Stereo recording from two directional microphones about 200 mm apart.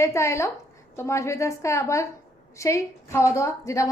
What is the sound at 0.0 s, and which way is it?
A woman's voice, 15° left (ahead or behind).